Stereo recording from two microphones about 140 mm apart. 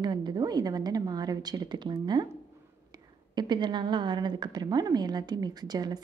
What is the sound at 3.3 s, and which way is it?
Speech, 30° right (ahead or behind).